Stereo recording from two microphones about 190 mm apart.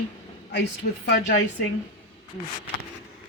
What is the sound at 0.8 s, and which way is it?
Speech, 55° left (ahead or behind).